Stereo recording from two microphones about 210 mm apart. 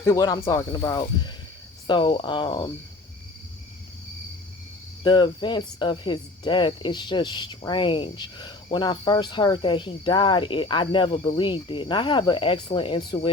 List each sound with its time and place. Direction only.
0.0 s speech: 15° left (ahead or behind)
5.0 s speech: 20° left (ahead or behind)